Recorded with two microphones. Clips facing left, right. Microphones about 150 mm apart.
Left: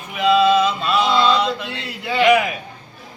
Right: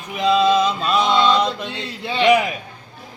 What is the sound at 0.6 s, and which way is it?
Music, 40° right (ahead or behind).